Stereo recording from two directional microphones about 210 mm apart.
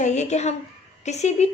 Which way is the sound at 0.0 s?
35° left (ahead or behind).